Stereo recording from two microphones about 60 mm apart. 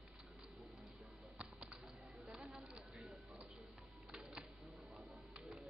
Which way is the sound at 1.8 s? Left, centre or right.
Centre.